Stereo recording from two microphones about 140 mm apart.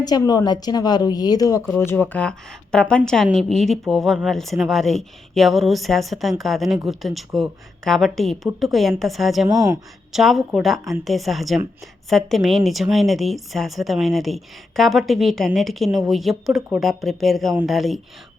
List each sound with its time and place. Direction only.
0.0 s a woman's voice: 30° left (ahead or behind); by 9.5 s centre (ahead or behind)
9.5 s speech: 25° right (ahead or behind)
10.1 s a woman's voice: centre (ahead or behind)